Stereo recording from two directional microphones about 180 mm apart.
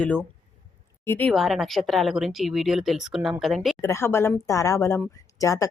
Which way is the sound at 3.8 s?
15° left (ahead or behind).